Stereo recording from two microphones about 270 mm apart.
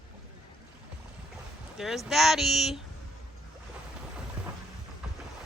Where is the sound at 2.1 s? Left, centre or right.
Centre.